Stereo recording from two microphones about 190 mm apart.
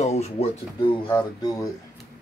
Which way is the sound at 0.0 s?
35° left (ahead or behind).